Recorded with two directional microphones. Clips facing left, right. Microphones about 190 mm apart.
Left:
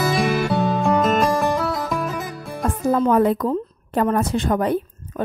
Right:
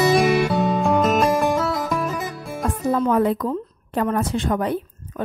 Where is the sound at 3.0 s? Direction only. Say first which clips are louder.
Left 2 dB; 45° left (ahead or behind).